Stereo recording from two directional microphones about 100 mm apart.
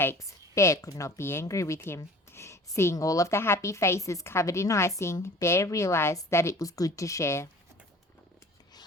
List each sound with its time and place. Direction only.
0.0 s a woman's voice: 25° left (ahead or behind)
2.3 s a sound: 30° left (ahead or behind)
2.9 s a woman's voice: 35° left (ahead or behind)